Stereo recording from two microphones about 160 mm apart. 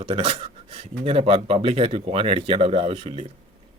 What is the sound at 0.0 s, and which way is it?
Speech, 35° right (ahead or behind).